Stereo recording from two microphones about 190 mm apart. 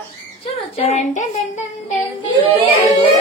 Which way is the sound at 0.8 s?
40° left (ahead or behind).